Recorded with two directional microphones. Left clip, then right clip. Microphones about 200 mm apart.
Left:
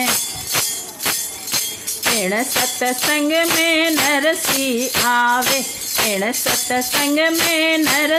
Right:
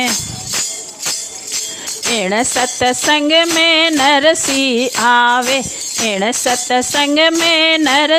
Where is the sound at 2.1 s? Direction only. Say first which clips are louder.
Right 7 dB; 50° right (ahead or behind).